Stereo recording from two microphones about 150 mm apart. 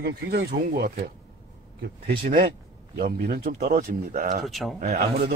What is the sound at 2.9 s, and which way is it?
Speech, 90° right.